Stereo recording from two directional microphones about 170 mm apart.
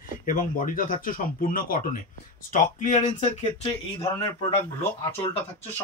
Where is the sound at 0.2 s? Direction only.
50° left (ahead or behind).